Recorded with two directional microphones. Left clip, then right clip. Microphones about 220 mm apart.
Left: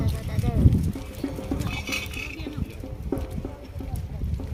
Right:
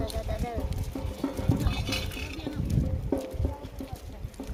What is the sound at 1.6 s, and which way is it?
Cutlery, 15° right (ahead or behind).